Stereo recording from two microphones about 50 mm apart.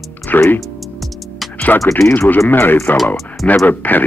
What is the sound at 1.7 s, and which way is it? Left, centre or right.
A man's voice, left.